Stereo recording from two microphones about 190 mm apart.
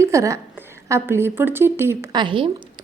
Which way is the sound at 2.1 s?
25° right (ahead or behind).